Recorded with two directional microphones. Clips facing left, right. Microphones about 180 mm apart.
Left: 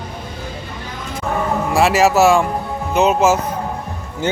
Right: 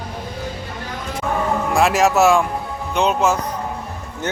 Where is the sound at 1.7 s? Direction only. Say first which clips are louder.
Left 2 dB; centre (ahead or behind).